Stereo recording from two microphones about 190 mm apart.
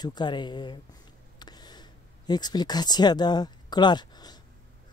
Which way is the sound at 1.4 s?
20° left (ahead or behind).